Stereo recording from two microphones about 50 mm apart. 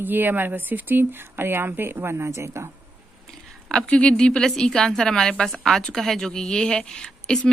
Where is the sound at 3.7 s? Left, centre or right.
Centre.